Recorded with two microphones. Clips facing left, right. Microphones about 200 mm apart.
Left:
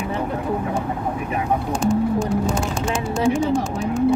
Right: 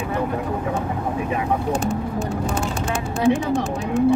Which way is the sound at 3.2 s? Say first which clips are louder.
Right 1 dB; 60° right (ahead or behind).